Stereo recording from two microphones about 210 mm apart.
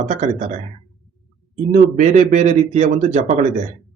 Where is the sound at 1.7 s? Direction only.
35° right (ahead or behind).